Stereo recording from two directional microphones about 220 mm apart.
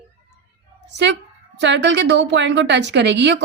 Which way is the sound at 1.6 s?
55° right (ahead or behind).